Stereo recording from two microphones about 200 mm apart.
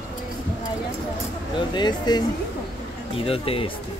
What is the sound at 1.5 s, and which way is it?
Speech, 20° left (ahead or behind).